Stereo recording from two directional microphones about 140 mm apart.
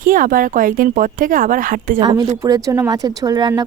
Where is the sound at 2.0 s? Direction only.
30° right (ahead or behind).